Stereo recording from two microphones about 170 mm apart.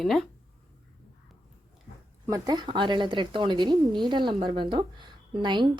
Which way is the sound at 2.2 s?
20° right (ahead or behind).